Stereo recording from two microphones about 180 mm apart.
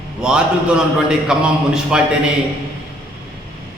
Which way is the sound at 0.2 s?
5° right (ahead or behind).